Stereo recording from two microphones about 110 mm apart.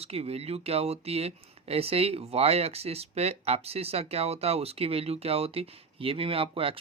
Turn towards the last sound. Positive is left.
turn(degrees=-55)  # may be behind; listen again after turning